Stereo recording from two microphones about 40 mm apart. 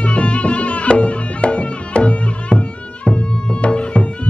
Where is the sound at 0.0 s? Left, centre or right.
Left.